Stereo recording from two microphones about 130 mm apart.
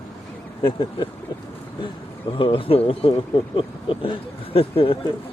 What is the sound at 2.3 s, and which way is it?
Speech, 40° left (ahead or behind).